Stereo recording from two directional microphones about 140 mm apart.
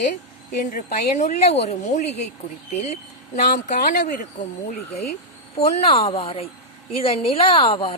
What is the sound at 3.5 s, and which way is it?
Speech, 65° left (ahead or behind).